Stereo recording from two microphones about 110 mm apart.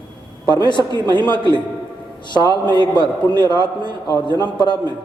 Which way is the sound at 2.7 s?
45° left (ahead or behind).